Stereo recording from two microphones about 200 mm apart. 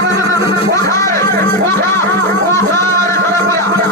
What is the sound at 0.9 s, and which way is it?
Music, 15° left (ahead or behind).